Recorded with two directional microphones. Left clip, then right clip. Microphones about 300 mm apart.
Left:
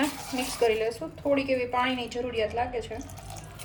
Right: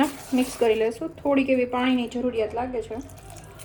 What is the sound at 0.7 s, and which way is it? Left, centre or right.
Speech, right.